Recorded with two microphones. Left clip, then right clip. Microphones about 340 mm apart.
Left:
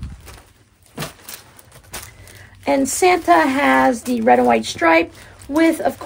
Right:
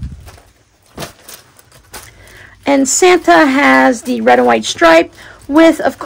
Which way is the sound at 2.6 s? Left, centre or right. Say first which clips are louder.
Right 6 dB; right.